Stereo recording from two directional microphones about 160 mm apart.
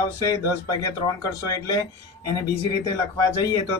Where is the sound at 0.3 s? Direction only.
20° left (ahead or behind).